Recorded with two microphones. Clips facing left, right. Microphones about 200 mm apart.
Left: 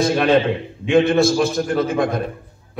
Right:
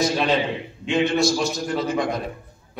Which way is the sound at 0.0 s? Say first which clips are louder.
Left 5 dB; 55° left (ahead or behind).